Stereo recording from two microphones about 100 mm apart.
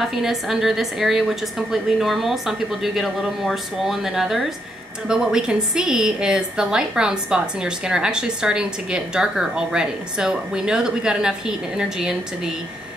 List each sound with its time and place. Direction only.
0.0 s a woman's voice: 5° right (ahead or behind)